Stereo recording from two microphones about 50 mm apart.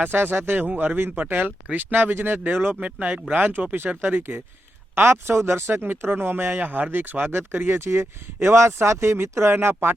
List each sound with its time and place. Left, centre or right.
0.0 s speech: right
0.9 s speech: right
4.0 s speech: right